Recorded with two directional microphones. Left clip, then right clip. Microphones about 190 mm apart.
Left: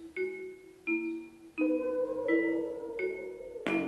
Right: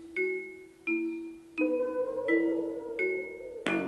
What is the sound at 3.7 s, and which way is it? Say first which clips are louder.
Music: right 1 dB; 40° right (ahead or behind).